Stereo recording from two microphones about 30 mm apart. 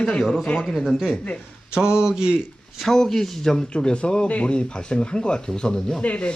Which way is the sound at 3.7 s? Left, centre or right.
Left.